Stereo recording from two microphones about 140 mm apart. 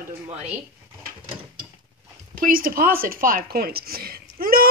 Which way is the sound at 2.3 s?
90° right.